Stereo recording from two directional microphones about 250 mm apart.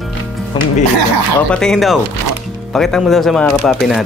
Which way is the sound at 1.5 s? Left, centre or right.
Centre.